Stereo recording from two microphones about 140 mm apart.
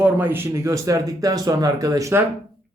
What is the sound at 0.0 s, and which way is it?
Speech, 15° right (ahead or behind).